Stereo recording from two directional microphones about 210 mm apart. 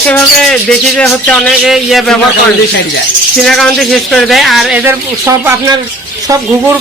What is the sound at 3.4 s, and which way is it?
Speech, centre (ahead or behind).